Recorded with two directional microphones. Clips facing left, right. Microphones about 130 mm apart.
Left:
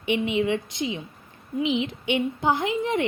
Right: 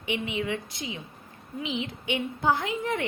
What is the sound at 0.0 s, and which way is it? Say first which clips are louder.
A woman's voice: left 7 dB; 25° left (ahead or behind).